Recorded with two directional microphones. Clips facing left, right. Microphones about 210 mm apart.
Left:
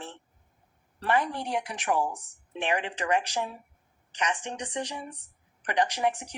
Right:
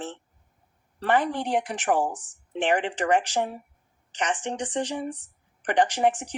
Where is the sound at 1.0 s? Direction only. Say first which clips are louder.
Right 4 dB; 50° right (ahead or behind).